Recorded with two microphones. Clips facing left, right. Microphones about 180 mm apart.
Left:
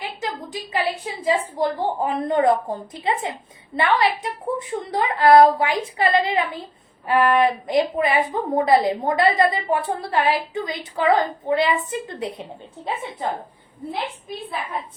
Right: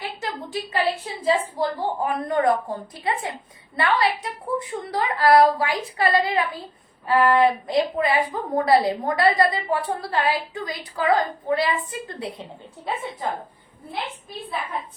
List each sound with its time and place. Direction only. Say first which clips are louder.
0.2 s a woman's voice: even; 15° left (ahead or behind)